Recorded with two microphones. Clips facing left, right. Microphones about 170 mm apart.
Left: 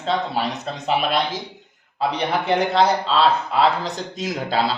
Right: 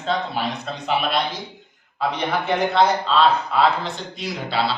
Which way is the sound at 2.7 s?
35° left (ahead or behind).